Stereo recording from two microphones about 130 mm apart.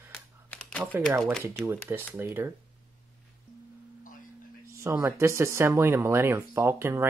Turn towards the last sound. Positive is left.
turn(degrees=-20)  # may be behind; listen again after turning